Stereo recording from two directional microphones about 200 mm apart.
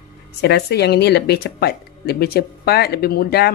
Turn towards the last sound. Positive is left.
turn(degrees=50)  # may be behind; listen again after turning